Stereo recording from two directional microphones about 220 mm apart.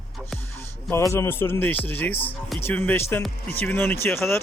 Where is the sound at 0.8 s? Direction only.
10° left (ahead or behind).